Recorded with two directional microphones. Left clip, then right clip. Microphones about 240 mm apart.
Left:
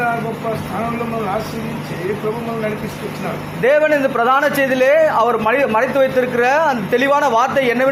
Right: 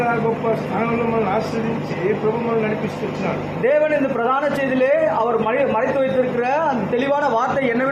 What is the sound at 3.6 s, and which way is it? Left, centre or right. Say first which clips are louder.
A man's voice: left 4 dB; left.